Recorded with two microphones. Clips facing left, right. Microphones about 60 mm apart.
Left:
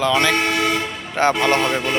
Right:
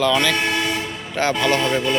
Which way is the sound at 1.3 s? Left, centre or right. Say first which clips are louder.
Left 1 dB; left.